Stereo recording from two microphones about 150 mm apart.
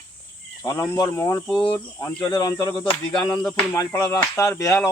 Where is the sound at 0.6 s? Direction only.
20° left (ahead or behind).